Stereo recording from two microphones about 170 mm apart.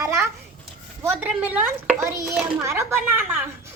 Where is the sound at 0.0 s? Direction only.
15° right (ahead or behind).